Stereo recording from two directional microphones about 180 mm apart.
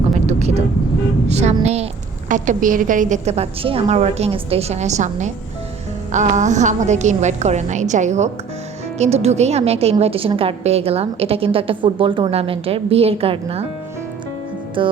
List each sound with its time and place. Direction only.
0.3 s vehicle: 35° right (ahead or behind)
1.3 s a woman's voice: 35° right (ahead or behind)
14.8 s music: 30° right (ahead or behind)